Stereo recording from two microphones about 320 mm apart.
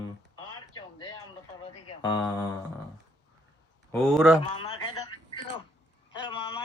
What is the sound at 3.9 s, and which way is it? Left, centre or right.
Speech, centre.